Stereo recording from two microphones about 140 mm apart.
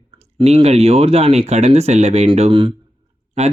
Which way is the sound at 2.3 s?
40° right (ahead or behind).